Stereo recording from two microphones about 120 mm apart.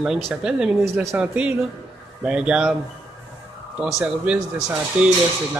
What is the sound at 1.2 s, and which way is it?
Speech, 10° right (ahead or behind).